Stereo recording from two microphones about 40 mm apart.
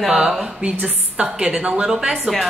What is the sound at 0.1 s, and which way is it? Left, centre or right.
Speech, centre.